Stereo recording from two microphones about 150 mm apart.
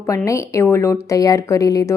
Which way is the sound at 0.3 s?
20° left (ahead or behind).